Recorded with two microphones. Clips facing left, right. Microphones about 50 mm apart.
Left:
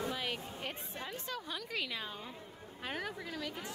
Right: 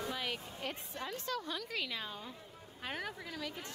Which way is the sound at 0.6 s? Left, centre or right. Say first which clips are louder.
Right 1 dB; centre.